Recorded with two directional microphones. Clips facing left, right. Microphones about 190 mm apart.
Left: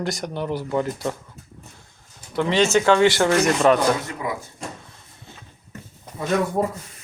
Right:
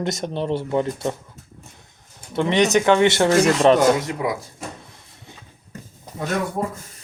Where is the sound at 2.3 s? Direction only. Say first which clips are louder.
Right 1 dB; 20° right (ahead or behind).